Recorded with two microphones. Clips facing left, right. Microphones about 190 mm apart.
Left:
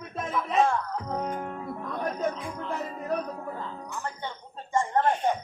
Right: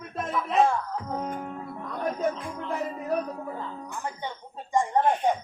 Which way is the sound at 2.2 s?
5° right (ahead or behind).